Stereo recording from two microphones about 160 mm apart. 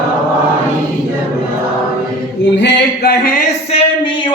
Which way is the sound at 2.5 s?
85° left.